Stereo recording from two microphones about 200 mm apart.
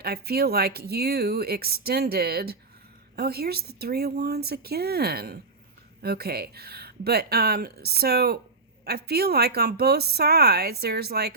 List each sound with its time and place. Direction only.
0.0 s speech: 50° right (ahead or behind)